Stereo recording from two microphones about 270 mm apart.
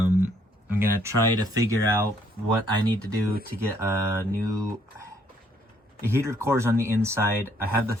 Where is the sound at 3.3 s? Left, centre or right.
Right.